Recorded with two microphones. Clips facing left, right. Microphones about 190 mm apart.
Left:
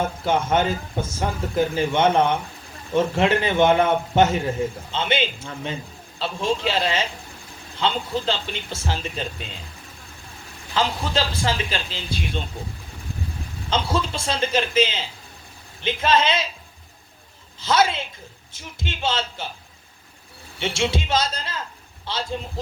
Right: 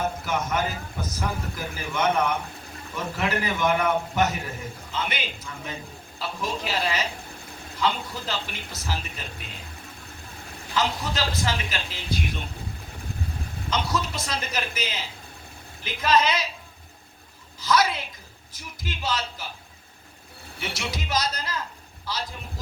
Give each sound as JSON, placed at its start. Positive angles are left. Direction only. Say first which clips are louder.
{"t": 0.0, "sound": "a man's voice", "louder": "left 5 dB", "side_deg": 30}
{"t": 10.8, "sound": "a man's voice", "louder": "left 3 dB", "side_deg": 30}
{"t": 13.7, "sound": "a man's voice", "louder": "left 4 dB", "side_deg": 30}
{"t": 17.6, "sound": "a man's voice", "louder": "left 3 dB", "side_deg": 25}
{"t": 20.6, "sound": "a man's voice", "louder": "left 8 dB", "side_deg": 25}